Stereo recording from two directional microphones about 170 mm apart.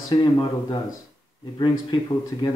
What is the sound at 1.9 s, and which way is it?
Speech, 30° left (ahead or behind).